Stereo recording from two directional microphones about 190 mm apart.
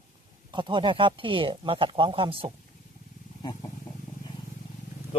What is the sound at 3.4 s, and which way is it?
Speech, 20° left (ahead or behind).